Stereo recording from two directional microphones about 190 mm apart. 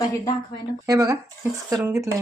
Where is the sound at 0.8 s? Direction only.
20° right (ahead or behind).